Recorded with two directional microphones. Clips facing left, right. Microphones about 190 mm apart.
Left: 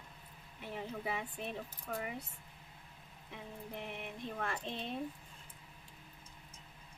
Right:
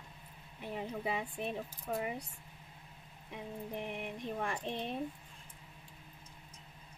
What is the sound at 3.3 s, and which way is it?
Speech, 15° right (ahead or behind).